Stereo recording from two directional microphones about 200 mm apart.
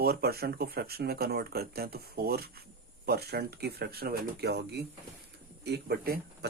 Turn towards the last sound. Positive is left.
turn(degrees=-50)  # may be behind; listen again after turning